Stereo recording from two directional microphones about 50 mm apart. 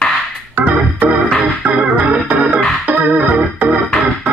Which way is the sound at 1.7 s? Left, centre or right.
Right.